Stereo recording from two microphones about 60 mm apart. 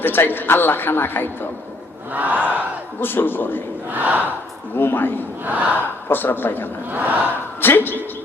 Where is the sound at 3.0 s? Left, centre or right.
Left.